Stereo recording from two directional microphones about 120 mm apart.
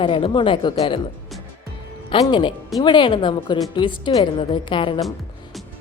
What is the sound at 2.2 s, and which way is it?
A woman's voice, 40° left (ahead or behind).